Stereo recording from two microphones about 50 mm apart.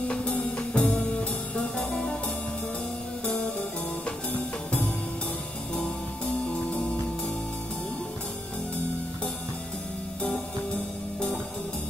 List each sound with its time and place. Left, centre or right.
0.1 s music: left